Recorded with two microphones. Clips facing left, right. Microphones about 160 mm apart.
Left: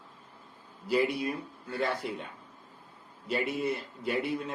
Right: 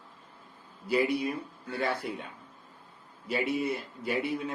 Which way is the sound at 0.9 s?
Centre (ahead or behind).